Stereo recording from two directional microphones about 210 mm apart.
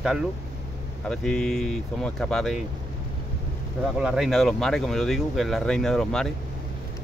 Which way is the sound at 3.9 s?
5° right (ahead or behind).